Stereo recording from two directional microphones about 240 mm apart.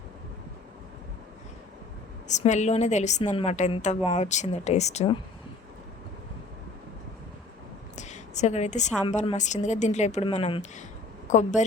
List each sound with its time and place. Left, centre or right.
2.2 s speech: left
7.9 s a sound: left
9.0 s speech: left